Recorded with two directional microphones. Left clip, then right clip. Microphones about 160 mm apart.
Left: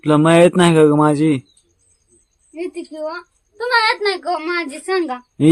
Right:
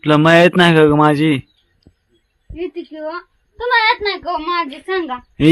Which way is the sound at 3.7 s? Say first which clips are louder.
Right 1 dB; 40° left (ahead or behind).